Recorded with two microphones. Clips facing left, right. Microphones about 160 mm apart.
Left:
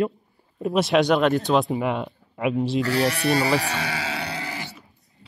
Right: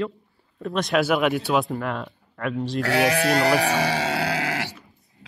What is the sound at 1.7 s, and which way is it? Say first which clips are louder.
Speech: left 3 dB; 5° left (ahead or behind).